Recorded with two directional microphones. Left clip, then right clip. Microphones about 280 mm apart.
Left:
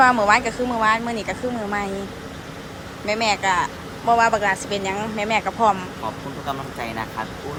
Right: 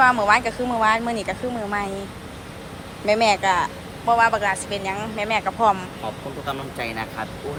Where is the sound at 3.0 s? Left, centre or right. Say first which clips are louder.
Right 3 dB; centre.